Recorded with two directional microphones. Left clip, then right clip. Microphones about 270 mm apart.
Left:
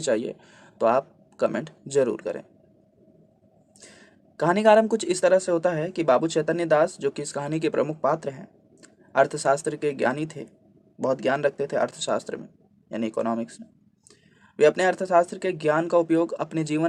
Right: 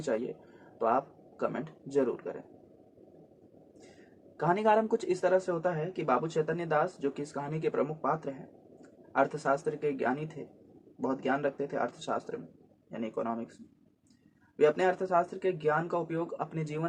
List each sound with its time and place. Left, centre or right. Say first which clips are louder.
0.1 s speech: left 7 dB; left
4.4 s speech: left 9 dB; left
14.5 s speech: left 7 dB; left